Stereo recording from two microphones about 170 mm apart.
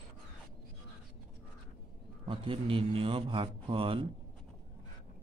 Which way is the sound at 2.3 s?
30° right (ahead or behind).